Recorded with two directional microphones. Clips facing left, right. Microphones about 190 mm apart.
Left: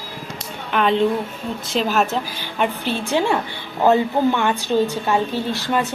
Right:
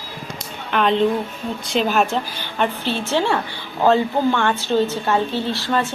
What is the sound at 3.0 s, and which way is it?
A woman's voice, 15° left (ahead or behind).